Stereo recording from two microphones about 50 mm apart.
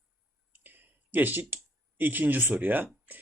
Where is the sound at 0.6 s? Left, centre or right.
Right.